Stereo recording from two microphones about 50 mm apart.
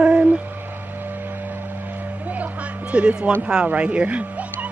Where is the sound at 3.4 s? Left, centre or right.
Centre.